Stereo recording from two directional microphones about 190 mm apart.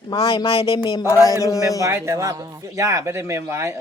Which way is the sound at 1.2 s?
15° left (ahead or behind).